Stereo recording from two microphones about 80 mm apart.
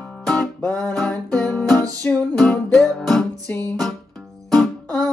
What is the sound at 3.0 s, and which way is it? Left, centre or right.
Music, centre.